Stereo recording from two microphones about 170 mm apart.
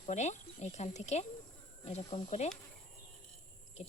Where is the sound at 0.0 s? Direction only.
45° left (ahead or behind).